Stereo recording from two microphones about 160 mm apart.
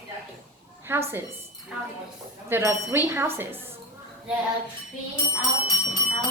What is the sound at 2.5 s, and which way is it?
Speech, 15° right (ahead or behind).